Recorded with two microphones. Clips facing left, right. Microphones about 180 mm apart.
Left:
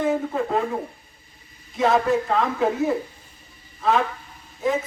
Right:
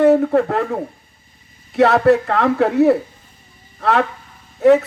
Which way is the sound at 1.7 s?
70° right (ahead or behind).